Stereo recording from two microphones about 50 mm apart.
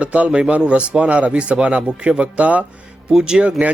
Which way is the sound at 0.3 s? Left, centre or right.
Right.